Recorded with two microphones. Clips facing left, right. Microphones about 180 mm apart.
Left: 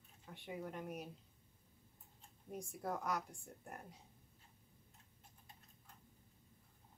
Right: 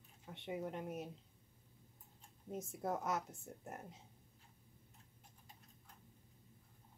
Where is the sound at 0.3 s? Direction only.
20° right (ahead or behind).